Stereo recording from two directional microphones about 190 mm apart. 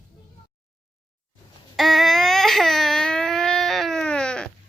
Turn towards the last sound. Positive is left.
turn(degrees=5)  # may be behind; listen again after turning